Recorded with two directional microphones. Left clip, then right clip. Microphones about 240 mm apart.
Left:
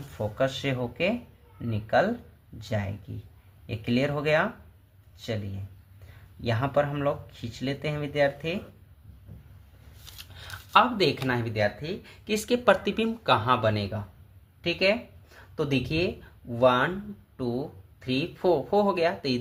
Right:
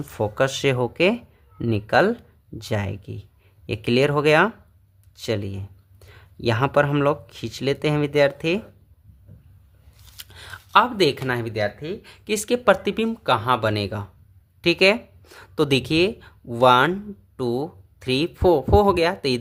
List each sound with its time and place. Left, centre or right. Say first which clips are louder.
0.2 s speech: right 6 dB; right
6.4 s speech: right 6 dB; right
10.2 s speech: right 4 dB; right